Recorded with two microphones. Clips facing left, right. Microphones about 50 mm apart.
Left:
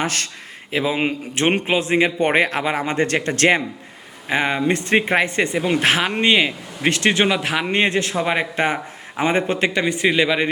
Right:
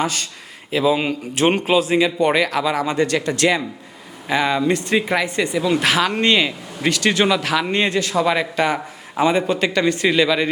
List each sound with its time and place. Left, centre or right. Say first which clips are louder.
0.0 s speech: right 1 dB; left
0.7 s speech: right 3 dB; left
4.3 s a man's voice: right 1 dB; left